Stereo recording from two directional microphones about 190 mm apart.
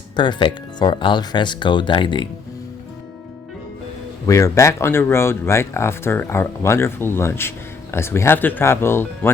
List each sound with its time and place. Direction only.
0.2 s speech: 25° left (ahead or behind)
4.3 s speech: 15° left (ahead or behind)